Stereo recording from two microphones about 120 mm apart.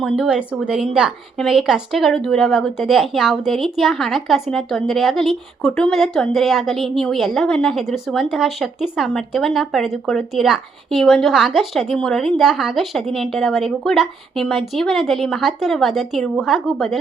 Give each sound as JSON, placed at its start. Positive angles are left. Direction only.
{"t": 0.0, "sound": "a woman's voice", "side_deg": -5}